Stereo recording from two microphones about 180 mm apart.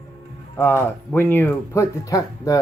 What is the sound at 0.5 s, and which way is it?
Speech, 10° left (ahead or behind).